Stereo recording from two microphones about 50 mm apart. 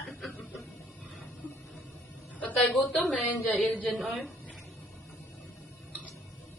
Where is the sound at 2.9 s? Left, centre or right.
Left.